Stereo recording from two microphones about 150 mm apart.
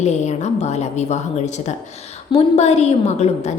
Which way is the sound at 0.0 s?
50° left (ahead or behind).